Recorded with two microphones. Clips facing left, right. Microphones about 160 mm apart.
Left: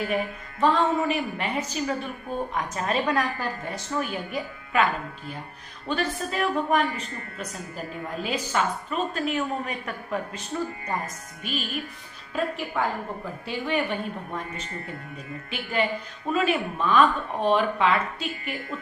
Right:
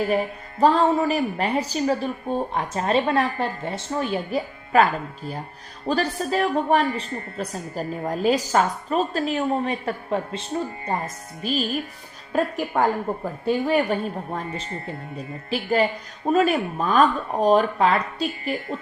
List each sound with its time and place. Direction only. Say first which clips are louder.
0.6 s a woman's voice: right 4 dB; 35° right (ahead or behind)